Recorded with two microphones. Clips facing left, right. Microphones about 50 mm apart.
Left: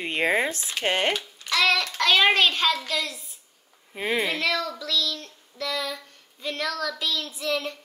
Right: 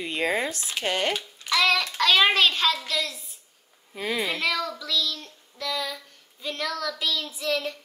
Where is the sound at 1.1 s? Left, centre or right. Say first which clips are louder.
Even; centre.